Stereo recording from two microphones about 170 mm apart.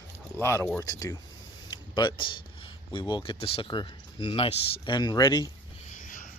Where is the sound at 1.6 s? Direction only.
25° left (ahead or behind).